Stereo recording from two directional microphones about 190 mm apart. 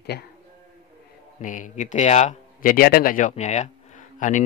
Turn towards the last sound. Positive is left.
turn(degrees=40)  # may be behind; listen again after turning